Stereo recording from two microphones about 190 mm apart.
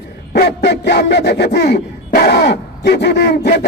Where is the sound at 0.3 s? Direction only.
60° left (ahead or behind).